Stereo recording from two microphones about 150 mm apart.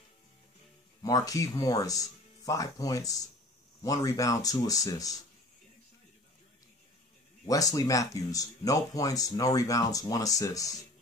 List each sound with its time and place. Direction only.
1.0 s speech: 25° left (ahead or behind)
7.7 s speech: 25° left (ahead or behind)